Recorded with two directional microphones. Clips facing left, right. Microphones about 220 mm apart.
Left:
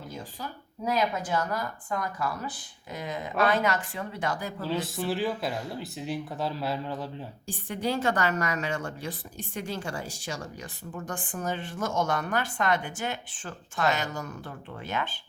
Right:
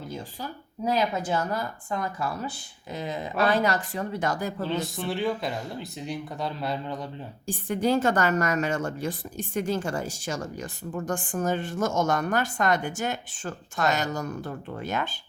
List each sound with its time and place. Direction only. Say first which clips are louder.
0.9 s speech: right 2 dB; 30° right (ahead or behind); by 4.5 s 45° right (ahead or behind)
4.6 s speech: left 2 dB; 5° left (ahead or behind)
7.4 s a woman's voice: right 6 dB; 45° right (ahead or behind)